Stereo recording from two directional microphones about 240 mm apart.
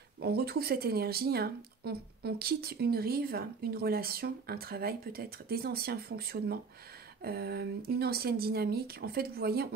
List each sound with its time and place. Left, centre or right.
0.2 s speech: right